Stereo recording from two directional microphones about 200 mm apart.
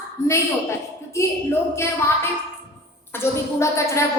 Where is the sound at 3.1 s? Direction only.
15° left (ahead or behind).